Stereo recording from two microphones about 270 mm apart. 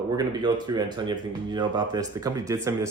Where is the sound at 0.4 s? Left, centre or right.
Centre.